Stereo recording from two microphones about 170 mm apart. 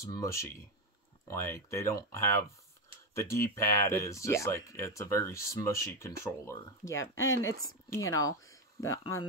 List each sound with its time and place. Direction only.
0.0 s speech: 20° left (ahead or behind)